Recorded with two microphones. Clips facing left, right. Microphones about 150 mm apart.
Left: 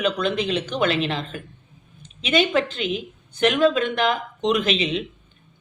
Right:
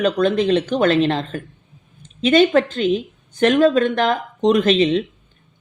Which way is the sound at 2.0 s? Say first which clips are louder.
Right 7 dB; 45° right (ahead or behind).